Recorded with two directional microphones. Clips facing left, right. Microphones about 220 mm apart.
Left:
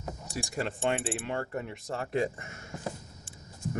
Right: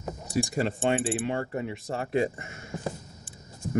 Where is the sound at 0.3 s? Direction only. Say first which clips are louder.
Right 7 dB; 10° right (ahead or behind).